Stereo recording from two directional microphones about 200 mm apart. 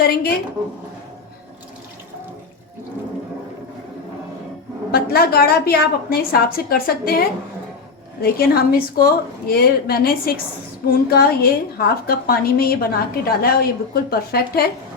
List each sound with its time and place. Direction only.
0.0 s a woman's voice: 50° left (ahead or behind)
4.9 s a woman's voice: 50° left (ahead or behind)